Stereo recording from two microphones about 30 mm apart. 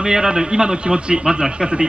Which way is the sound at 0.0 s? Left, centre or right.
Right.